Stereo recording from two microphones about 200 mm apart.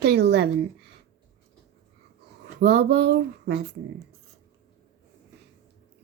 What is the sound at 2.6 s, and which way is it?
Speech, 55° right (ahead or behind).